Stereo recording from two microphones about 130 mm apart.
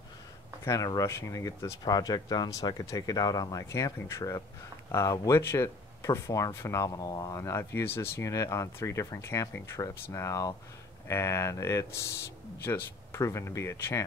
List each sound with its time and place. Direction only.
0.7 s speech: 25° left (ahead or behind)